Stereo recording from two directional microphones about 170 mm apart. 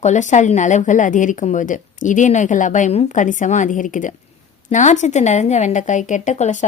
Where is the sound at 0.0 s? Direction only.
45° left (ahead or behind).